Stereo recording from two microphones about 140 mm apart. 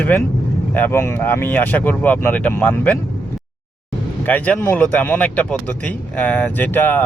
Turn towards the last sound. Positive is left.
turn(degrees=15)  # may be behind; listen again after turning